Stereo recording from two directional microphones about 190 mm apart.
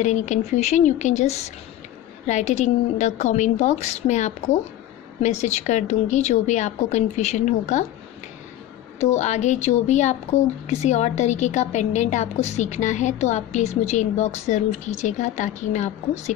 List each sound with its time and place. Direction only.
0.0 s speech: 40° left (ahead or behind)
9.1 s speech: 35° left (ahead or behind)